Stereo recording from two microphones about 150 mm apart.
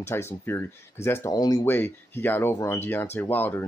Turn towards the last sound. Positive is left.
turn(degrees=15)  # may be behind; listen again after turning